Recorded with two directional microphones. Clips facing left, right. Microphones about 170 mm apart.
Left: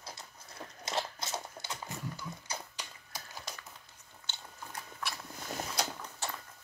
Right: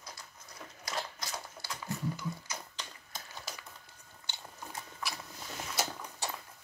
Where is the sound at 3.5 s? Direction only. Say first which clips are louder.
Right 1 dB; 5° right (ahead or behind).